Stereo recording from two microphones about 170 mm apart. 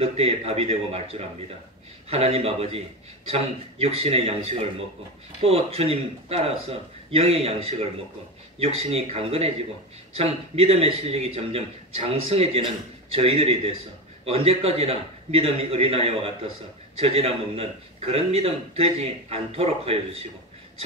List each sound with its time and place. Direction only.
0.0 s a man's voice: 35° right (ahead or behind)